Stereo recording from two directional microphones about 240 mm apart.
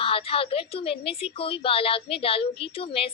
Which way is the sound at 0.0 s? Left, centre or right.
Left.